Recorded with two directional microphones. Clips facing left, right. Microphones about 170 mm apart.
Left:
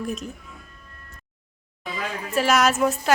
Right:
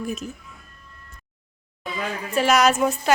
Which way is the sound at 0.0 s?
Centre (ahead or behind).